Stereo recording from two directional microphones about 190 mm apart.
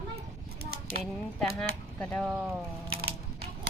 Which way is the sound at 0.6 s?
55° right (ahead or behind).